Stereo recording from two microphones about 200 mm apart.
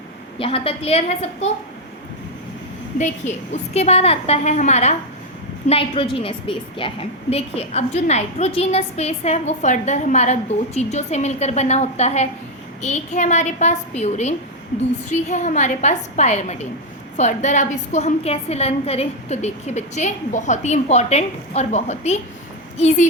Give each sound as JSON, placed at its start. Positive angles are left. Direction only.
{"t": 0.3, "sound": "a woman's voice", "side_deg": 30}
{"t": 3.0, "sound": "a woman's voice", "side_deg": 35}